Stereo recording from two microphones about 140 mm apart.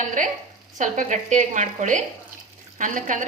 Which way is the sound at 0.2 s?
65° right (ahead or behind).